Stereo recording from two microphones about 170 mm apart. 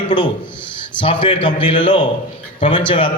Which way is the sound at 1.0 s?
30° left (ahead or behind).